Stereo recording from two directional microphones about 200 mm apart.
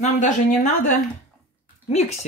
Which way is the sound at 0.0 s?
40° left (ahead or behind).